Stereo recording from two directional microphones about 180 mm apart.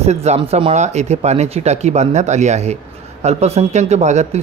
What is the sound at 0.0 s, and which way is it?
Speech, 35° right (ahead or behind).